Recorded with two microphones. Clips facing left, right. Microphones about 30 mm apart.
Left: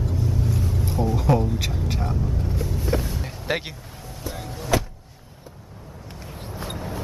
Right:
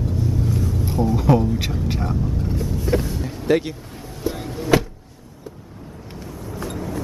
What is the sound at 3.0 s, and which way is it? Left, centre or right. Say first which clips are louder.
Vehicle: right 4 dB; centre.